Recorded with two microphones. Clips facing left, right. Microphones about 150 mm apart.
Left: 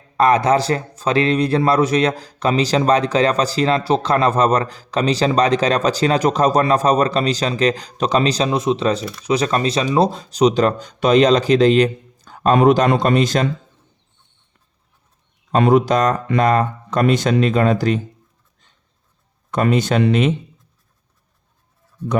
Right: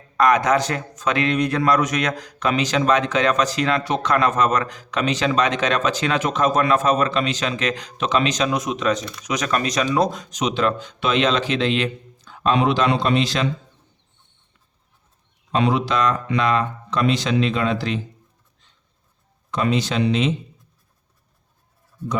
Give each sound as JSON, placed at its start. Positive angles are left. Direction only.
{"t": 0.2, "sound": "a man's voice", "side_deg": 30}
{"t": 15.5, "sound": "speech", "side_deg": 45}
{"t": 19.5, "sound": "speech", "side_deg": 50}